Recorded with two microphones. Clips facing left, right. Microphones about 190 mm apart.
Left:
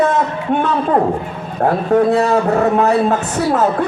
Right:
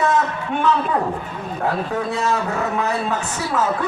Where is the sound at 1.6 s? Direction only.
60° left (ahead or behind).